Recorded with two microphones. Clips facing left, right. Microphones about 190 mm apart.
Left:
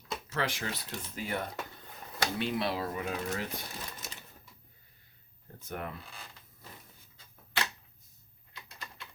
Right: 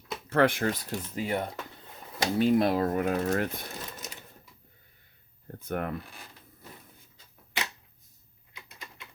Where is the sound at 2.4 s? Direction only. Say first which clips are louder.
Right 11 dB; 45° right (ahead or behind).